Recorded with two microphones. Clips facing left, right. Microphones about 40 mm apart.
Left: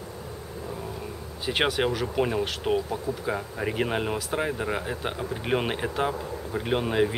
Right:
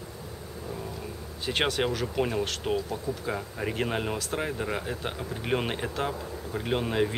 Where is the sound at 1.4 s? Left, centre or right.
Centre.